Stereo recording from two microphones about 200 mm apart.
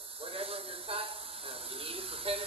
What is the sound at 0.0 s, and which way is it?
Speech, 30° right (ahead or behind).